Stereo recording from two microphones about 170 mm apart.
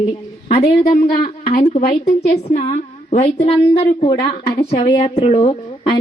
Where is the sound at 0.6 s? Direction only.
50° left (ahead or behind).